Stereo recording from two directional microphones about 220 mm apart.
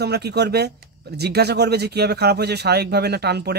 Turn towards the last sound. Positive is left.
turn(degrees=-50)  # may be behind; listen again after turning